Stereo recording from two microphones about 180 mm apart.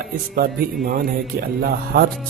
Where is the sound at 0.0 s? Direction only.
60° right (ahead or behind).